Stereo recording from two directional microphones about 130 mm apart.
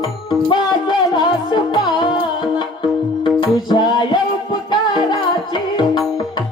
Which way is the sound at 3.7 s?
35° left (ahead or behind).